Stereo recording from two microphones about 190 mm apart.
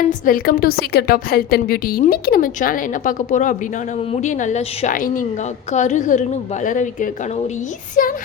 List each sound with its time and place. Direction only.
0.3 s a woman's voice: 50° left (ahead or behind)